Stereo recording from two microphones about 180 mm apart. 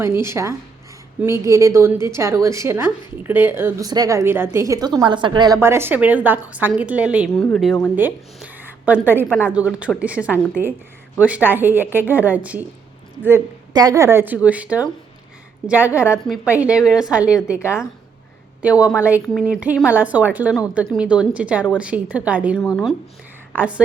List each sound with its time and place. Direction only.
0.0 s a woman's voice: 15° right (ahead or behind)
5.5 s a woman's voice: 15° right (ahead or behind); by 7.9 s 5° left (ahead or behind)
7.9 s a woman's voice: 10° right (ahead or behind)
16.5 s a woman's voice: 5° right (ahead or behind)
18.6 s a woman's voice: 5° right (ahead or behind)